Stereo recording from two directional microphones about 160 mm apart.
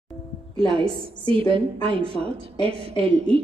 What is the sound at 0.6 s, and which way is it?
A woman's voice, 35° right (ahead or behind).